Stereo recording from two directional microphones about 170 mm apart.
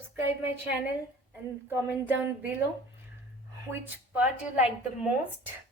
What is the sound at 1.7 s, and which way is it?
Child singing, 10° right (ahead or behind).